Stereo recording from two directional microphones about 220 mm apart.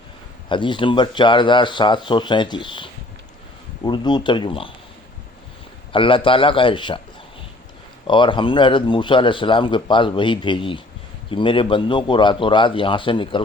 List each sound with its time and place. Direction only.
0.4 s a man's voice: 20° left (ahead or behind)
5.9 s a man's voice: 25° left (ahead or behind)
8.0 s a man's voice: 20° left (ahead or behind)